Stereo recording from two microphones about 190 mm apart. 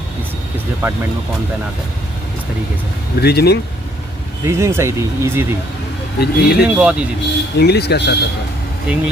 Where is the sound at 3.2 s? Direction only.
60° left (ahead or behind).